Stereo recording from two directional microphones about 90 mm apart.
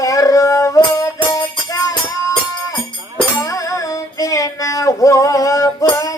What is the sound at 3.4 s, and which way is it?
Child singing, 40° left (ahead or behind).